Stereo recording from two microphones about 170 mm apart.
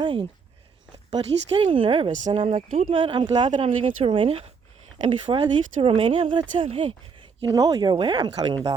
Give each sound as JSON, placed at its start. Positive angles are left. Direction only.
{"t": 0.0, "sound": "speech", "side_deg": -30}
{"t": 7.4, "sound": "speech", "side_deg": -20}